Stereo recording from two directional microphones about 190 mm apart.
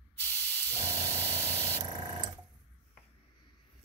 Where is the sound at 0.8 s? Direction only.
15° right (ahead or behind).